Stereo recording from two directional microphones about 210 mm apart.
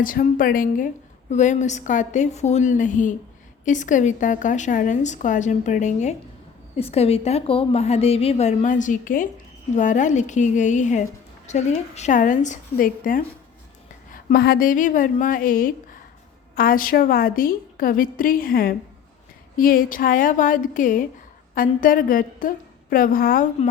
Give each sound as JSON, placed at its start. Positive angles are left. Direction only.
{"t": 0.0, "sound": "a woman's voice", "side_deg": 40}